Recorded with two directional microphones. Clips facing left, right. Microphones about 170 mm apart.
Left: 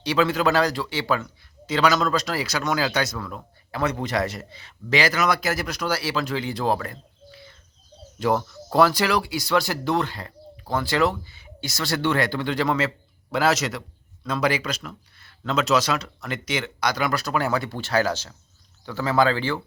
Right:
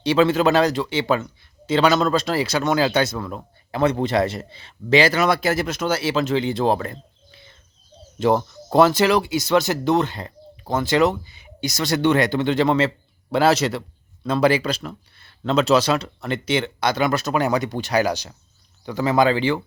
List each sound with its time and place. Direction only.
0.0 s a man's voice: 25° right (ahead or behind)